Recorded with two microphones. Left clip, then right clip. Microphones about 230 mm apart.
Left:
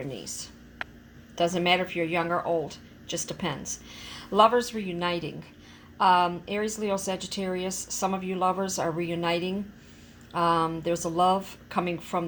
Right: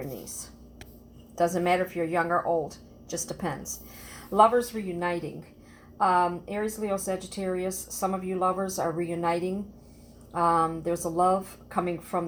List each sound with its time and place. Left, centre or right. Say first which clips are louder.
1.5 s a woman's voice: left 1 dB; left